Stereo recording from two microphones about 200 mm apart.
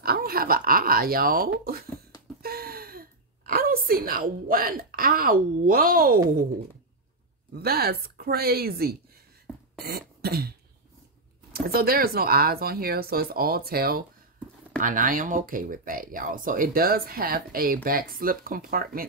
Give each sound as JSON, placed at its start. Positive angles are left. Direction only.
{"t": 0.0, "sound": "speech", "side_deg": -50}
{"t": 2.4, "sound": "gasp", "side_deg": -50}
{"t": 7.5, "sound": "speech", "side_deg": -50}
{"t": 9.8, "sound": "cough", "side_deg": -50}
{"t": 11.5, "sound": "speech", "side_deg": -50}